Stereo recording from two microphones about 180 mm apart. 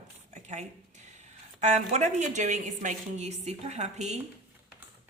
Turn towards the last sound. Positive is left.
turn(degrees=-40)  # may be behind; listen again after turning